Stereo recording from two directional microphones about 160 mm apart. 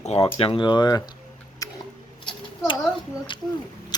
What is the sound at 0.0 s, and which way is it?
Speech, 40° left (ahead or behind).